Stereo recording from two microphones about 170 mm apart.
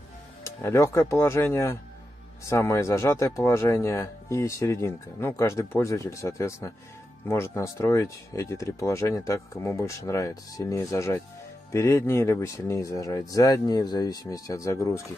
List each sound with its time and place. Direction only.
0.4 s speech: 15° left (ahead or behind)